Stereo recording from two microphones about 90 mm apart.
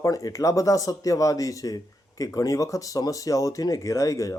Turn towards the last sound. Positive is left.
turn(degrees=35)  # may be behind; listen again after turning